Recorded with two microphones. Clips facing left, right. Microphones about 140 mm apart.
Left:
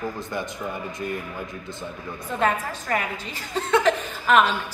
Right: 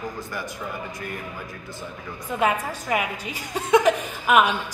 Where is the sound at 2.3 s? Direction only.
10° right (ahead or behind).